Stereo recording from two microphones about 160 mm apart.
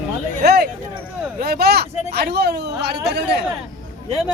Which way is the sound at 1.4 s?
75° right (ahead or behind).